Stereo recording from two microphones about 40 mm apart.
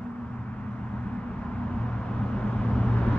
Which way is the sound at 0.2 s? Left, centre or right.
Left.